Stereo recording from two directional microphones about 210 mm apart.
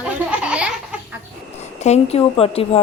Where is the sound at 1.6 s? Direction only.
30° left (ahead or behind).